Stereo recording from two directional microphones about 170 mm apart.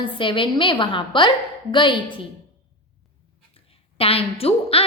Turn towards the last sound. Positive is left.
turn(degrees=35)  # may be behind; listen again after turning